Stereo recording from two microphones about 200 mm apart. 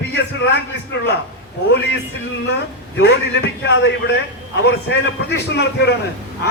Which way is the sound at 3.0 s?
60° left (ahead or behind).